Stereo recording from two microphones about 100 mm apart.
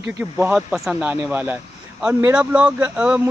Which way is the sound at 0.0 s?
20° right (ahead or behind).